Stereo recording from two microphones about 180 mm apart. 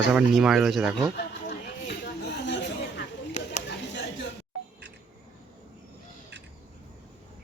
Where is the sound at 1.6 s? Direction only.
65° left (ahead or behind).